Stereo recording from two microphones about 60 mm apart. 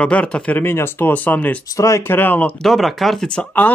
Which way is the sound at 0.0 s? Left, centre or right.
Left.